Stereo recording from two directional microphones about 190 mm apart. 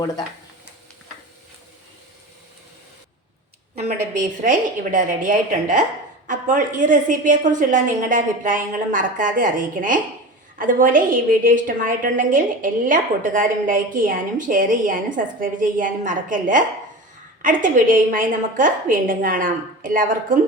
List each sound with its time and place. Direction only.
4.1 s a woman's voice: 40° right (ahead or behind)